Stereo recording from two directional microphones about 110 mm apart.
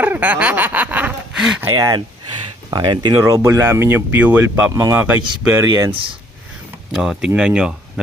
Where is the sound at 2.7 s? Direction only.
40° right (ahead or behind); by 4.7 s 15° right (ahead or behind).